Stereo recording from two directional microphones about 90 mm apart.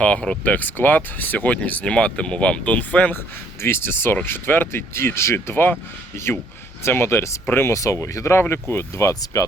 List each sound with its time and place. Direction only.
0.0 s speech: 10° left (ahead or behind)
3.6 s speech: 25° left (ahead or behind)